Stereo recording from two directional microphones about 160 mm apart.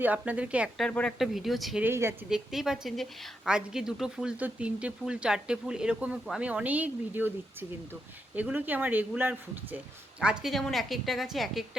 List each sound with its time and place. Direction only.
0.0 s speech: 10° right (ahead or behind)
0.9 s a woman's voice: 5° left (ahead or behind)
1.8 s speech: 15° right (ahead or behind)
2.3 s a woman's voice: centre (ahead or behind)
8.4 s a woman's voice: 10° right (ahead or behind)